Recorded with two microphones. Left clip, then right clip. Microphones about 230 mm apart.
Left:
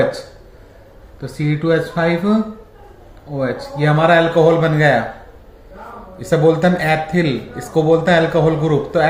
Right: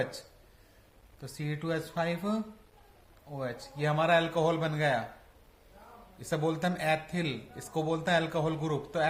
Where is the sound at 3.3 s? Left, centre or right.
Right.